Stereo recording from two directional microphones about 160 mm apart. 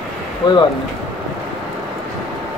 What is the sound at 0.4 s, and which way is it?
Speech, 25° left (ahead or behind).